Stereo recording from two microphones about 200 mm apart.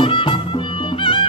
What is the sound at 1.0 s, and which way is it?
Music, 25° left (ahead or behind).